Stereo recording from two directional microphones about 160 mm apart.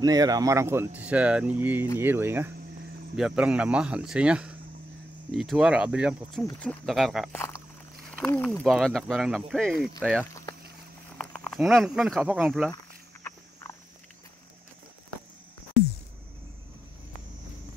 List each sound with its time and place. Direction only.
0.0 s speech: 25° right (ahead or behind); by 9.8 s centre (ahead or behind)
11.1 s speech: 5° left (ahead or behind)
13.2 s cricket: 15° left (ahead or behind)